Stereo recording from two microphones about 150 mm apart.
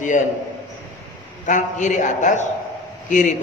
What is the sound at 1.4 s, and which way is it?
A man's voice, 55° left (ahead or behind).